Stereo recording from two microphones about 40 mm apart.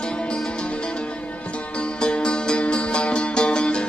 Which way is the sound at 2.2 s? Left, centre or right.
Left.